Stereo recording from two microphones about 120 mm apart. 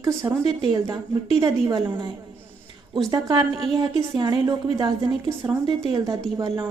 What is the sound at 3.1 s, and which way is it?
A woman's voice, 35° right (ahead or behind).